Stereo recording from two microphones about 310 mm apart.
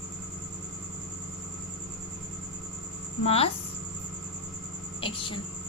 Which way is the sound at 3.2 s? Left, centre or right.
Centre.